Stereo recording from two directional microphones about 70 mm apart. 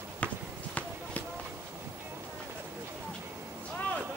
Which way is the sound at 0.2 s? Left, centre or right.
Centre.